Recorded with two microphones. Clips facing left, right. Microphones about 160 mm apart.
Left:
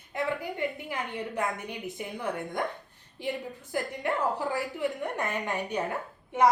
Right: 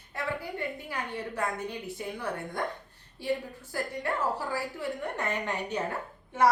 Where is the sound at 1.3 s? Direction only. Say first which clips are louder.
Even; 15° left (ahead or behind).